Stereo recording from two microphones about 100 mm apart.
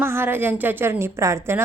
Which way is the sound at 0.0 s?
25° right (ahead or behind).